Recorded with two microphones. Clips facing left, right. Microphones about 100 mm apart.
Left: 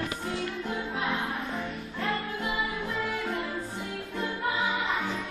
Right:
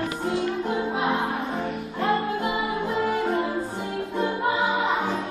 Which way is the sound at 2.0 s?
25° right (ahead or behind).